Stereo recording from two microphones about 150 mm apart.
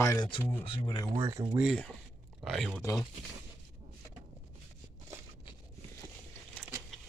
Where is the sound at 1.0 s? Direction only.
20° right (ahead or behind).